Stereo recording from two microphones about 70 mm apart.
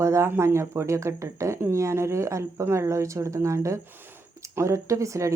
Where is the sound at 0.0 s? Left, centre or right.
Right.